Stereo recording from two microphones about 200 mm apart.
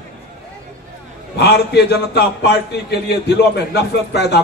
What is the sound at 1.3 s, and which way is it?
A man's voice, 55° left (ahead or behind).